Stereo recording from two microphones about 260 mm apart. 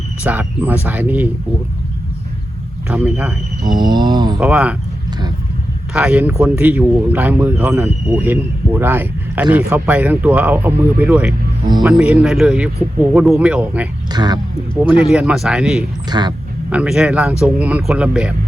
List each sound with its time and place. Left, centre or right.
0.2 s speech: centre
2.9 s speech: centre
3.8 s speech: centre
4.4 s speech: centre
5.9 s speech: centre
14.1 s speech: centre
15.1 s speech: centre
16.0 s speech: centre
16.6 s speech: centre